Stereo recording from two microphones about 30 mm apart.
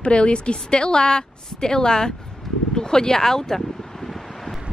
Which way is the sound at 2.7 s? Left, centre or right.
Left.